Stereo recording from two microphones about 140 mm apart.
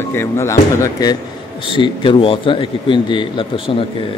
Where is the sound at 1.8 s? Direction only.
40° left (ahead or behind).